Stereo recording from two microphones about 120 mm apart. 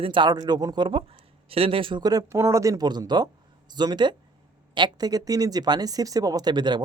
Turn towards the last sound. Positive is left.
turn(degrees=-40)  # may be behind; listen again after turning